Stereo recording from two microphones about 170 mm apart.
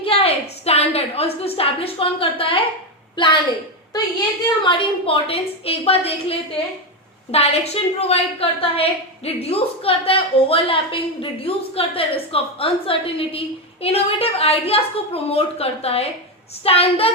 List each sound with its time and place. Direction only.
0.0 s a woman's voice: 35° left (ahead or behind)
4.6 s a woman's voice: 30° left (ahead or behind)